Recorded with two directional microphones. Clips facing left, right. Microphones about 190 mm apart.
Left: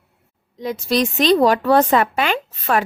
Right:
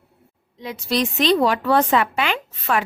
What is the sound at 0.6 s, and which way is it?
A woman's voice, 40° left (ahead or behind).